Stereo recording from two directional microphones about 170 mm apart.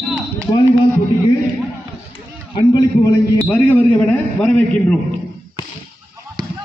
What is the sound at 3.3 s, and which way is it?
A man's voice, 10° left (ahead or behind).